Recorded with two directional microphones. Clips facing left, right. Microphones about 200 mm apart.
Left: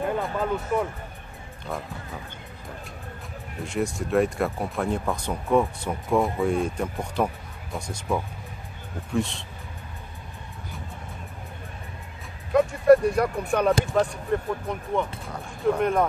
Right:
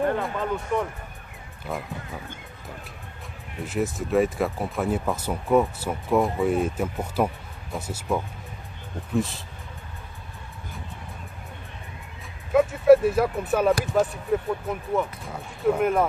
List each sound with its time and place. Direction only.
0.2 s speech: 5° left (ahead or behind)
3.6 s speech: centre (ahead or behind)
12.5 s speech: 5° right (ahead or behind)